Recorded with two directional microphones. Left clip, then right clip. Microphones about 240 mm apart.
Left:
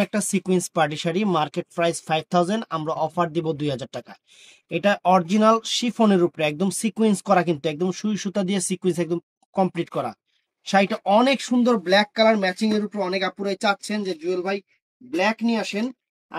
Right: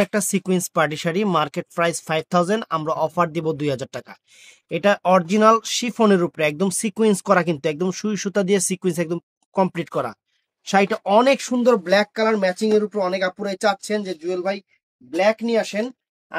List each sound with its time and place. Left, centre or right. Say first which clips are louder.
0.0 s speech: right 3 dB; right